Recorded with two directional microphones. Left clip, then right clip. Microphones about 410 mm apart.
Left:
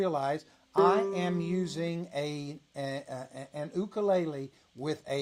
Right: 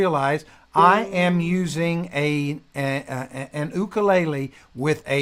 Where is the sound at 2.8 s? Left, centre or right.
Right.